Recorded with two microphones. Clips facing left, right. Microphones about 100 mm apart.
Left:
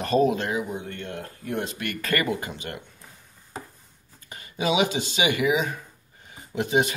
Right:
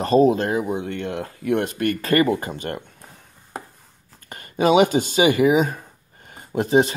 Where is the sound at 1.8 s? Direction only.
35° right (ahead or behind).